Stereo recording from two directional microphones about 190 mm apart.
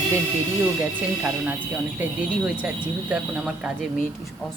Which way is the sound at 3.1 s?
5° right (ahead or behind).